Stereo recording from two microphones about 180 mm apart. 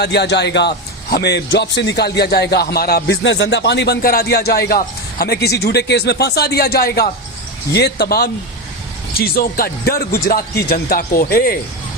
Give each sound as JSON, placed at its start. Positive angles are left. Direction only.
{"t": 0.0, "sound": "a man's voice", "side_deg": 70}